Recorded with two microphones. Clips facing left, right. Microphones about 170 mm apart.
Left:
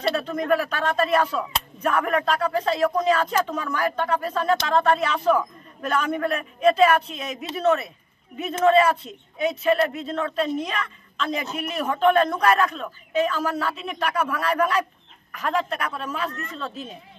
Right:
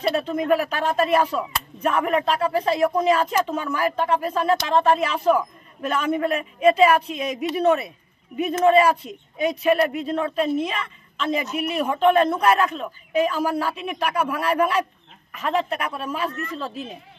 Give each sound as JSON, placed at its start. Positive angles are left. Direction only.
{"t": 0.1, "sound": "speech", "side_deg": -10}